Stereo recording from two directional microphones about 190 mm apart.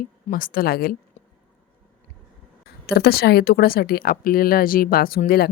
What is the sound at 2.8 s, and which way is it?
Speech, 55° left (ahead or behind).